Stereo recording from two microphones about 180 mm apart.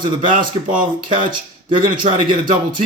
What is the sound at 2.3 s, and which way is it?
Speech, 50° right (ahead or behind).